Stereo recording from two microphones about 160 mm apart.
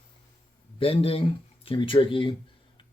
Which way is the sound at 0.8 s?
35° left (ahead or behind).